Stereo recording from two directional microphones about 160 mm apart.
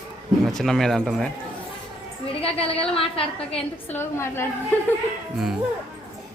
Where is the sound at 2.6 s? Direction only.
35° left (ahead or behind).